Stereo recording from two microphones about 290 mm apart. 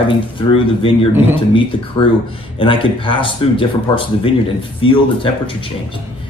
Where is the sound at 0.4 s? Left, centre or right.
Centre.